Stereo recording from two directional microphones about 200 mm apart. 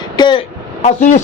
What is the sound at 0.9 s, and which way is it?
Speech, 35° left (ahead or behind).